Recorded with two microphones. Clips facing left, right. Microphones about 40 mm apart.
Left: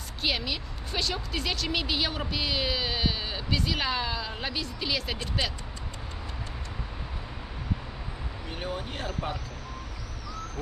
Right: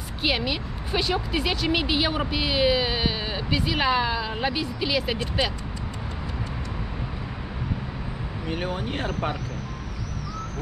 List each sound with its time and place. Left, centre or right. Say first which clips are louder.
0.2 s speech: right 5 dB; centre
8.5 s speech: right 6 dB; right